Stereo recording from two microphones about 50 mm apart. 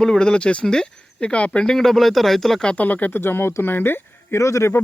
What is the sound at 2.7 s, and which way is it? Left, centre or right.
Speech, left.